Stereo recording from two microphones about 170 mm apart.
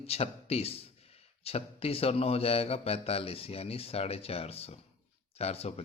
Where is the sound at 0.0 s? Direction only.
35° left (ahead or behind).